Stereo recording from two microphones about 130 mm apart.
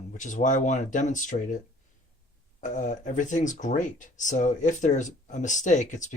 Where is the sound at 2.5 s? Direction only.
70° left (ahead or behind).